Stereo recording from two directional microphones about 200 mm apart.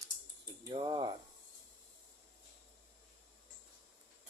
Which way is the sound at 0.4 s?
20° right (ahead or behind).